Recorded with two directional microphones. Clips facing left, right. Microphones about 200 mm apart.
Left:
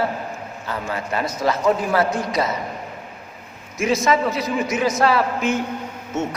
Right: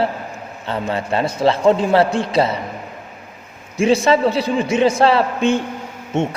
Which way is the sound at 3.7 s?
30° right (ahead or behind).